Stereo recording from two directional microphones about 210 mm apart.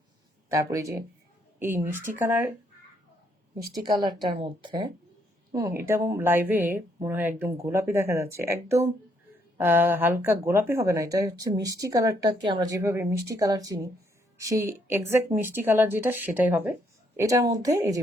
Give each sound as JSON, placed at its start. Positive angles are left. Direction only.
{"t": 0.4, "sound": "speech", "side_deg": -15}
{"t": 3.7, "sound": "speech", "side_deg": -20}